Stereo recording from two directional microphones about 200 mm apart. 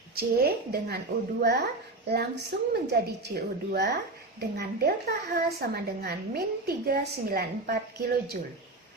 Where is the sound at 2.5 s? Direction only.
55° right (ahead or behind).